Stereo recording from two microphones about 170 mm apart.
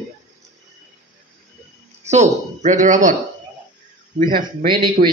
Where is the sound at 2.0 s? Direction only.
40° right (ahead or behind).